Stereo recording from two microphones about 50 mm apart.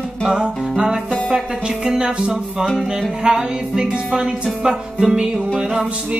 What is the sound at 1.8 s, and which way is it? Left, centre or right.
Music, centre.